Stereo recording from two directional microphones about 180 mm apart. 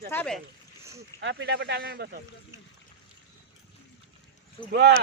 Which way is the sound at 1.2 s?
75° right (ahead or behind).